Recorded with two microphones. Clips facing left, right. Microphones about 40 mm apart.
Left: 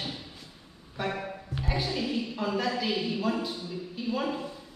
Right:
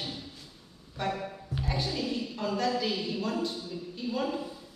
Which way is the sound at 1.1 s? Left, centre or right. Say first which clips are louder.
Right 2 dB; left.